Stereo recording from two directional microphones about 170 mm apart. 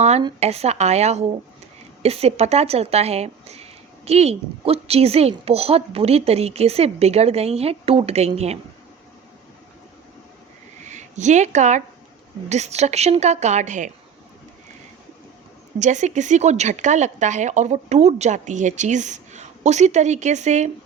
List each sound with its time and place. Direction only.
0.3 s speech: 40° right (ahead or behind)
10.8 s a woman's voice: 45° right (ahead or behind)
15.8 s speech: 45° right (ahead or behind)